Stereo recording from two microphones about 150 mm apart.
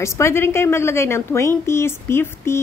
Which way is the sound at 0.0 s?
15° left (ahead or behind).